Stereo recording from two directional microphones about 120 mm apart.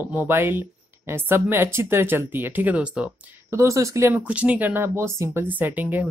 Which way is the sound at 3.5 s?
25° right (ahead or behind).